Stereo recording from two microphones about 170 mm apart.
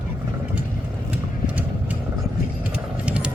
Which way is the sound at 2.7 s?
5° right (ahead or behind).